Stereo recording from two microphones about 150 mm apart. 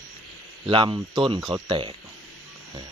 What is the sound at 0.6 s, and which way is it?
Speech, 35° right (ahead or behind).